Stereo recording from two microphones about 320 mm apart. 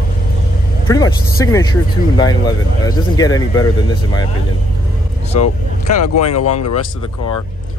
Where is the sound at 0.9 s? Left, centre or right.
Centre.